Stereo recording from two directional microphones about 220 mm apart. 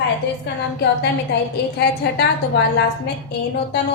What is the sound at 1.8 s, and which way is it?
Speech, 50° left (ahead or behind).